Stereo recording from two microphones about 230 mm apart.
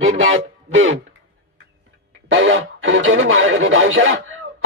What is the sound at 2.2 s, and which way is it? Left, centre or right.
Speech, right.